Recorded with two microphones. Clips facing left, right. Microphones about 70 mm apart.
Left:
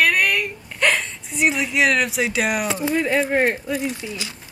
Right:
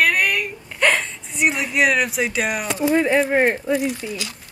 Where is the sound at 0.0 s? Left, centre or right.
Centre.